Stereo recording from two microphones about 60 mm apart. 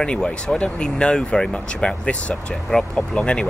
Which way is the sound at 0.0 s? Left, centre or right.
Centre.